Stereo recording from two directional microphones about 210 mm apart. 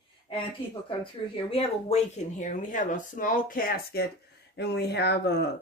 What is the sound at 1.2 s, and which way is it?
Speech, 25° left (ahead or behind).